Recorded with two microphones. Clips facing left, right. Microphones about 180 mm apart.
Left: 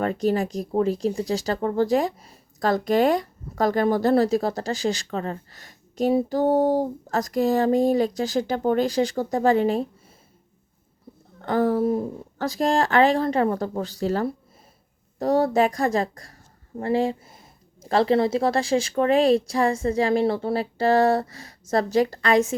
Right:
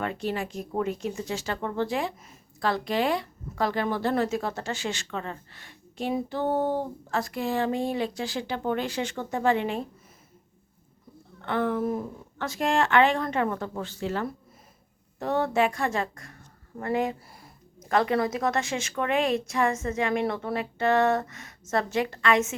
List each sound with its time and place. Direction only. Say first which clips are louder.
0.0 s speech: left 7 dB; 40° left (ahead or behind)
11.3 s speech: left 6 dB; 35° left (ahead or behind)